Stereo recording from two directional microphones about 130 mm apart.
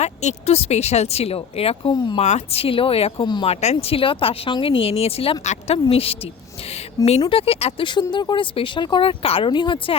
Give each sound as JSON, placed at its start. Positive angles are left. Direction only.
{"t": 0.0, "sound": "speech", "side_deg": 60}
{"t": 7.3, "sound": "speech", "side_deg": 45}